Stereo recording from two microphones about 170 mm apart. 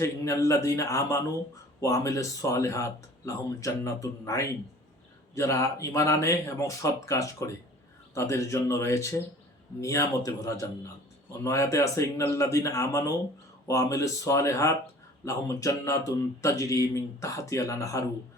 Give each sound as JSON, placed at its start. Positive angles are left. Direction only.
{"t": 0.0, "sound": "a man's voice", "side_deg": 20}